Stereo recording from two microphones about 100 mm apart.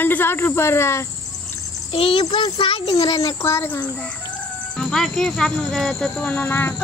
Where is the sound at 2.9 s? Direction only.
40° left (ahead or behind); by 4.1 s 20° left (ahead or behind).